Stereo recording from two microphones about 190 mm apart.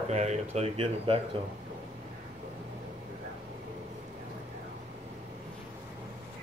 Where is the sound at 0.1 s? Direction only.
35° right (ahead or behind).